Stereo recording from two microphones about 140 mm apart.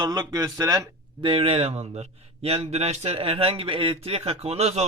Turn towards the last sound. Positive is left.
turn(degrees=-50)  # may be behind; listen again after turning